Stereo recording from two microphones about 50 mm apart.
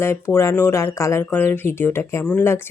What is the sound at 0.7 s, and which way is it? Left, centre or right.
Speech, left.